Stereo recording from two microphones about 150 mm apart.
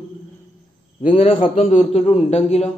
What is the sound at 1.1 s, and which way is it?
A man's voice, 40° left (ahead or behind).